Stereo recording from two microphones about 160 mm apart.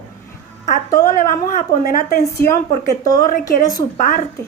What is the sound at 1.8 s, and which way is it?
Speech, 60° left (ahead or behind).